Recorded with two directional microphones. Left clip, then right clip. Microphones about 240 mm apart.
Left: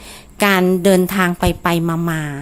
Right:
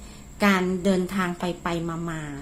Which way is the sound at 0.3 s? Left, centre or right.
Left.